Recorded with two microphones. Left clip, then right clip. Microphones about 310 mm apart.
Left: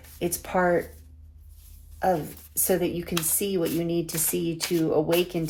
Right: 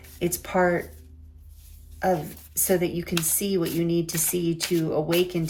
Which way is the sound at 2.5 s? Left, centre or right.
Centre.